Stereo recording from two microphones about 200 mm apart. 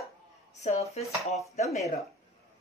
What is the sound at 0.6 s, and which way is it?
Speech, 35° left (ahead or behind).